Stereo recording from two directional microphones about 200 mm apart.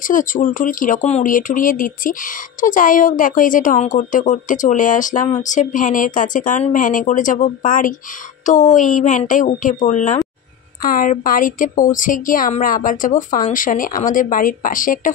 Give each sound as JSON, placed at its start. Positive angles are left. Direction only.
{"t": 0.0, "sound": "speech", "side_deg": 40}